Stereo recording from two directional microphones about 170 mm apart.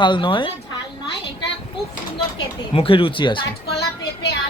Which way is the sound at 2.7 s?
30° left (ahead or behind).